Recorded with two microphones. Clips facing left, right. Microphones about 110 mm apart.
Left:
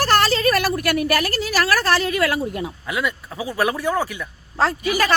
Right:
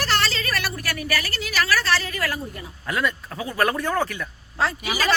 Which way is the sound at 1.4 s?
40° left (ahead or behind).